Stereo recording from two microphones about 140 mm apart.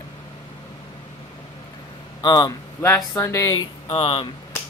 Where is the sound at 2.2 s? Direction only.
30° left (ahead or behind).